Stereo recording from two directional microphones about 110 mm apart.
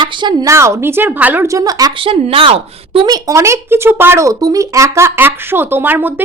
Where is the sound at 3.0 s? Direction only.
35° right (ahead or behind).